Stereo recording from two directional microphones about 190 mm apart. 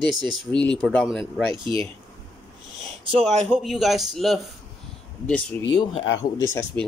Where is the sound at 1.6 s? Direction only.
25° right (ahead or behind).